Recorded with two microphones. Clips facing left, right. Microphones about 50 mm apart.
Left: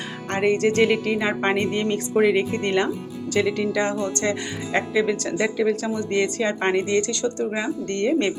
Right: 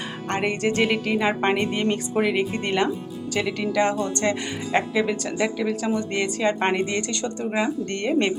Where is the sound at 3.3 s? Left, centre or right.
Centre.